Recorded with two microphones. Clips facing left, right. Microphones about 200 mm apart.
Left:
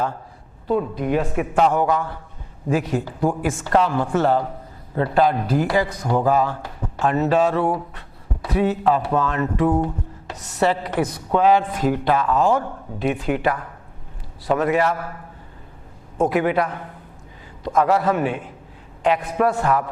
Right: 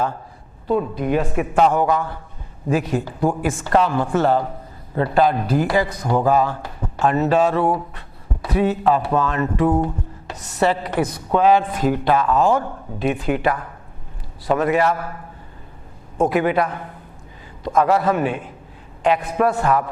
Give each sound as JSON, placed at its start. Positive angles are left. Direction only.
{"t": 0.7, "sound": "a man's voice", "side_deg": -20}
{"t": 3.4, "sound": "a man's voice", "side_deg": -15}
{"t": 16.3, "sound": "speech", "side_deg": -15}